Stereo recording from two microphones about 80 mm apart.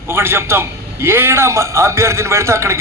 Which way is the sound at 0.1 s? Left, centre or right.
Right.